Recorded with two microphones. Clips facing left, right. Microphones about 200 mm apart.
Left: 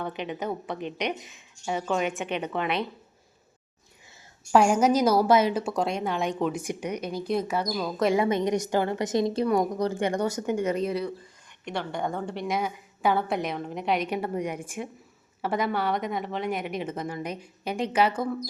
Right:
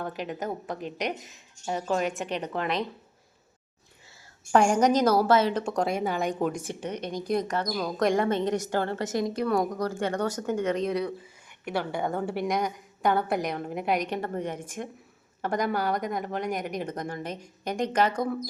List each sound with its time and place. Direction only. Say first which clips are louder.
0.0 s a woman's voice: left 1 dB; centre (ahead or behind)
4.5 s a woman's voice: left 1 dB; 5° left (ahead or behind)
6.6 s a woman's voice: left 2 dB; 15° left (ahead or behind)
14.1 s a woman's voice: left 2 dB; 10° left (ahead or behind)